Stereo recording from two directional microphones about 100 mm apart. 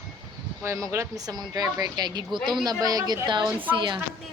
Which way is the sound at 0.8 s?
30° right (ahead or behind).